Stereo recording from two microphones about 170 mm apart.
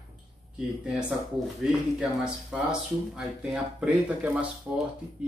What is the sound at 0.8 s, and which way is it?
Speech, 5° right (ahead or behind).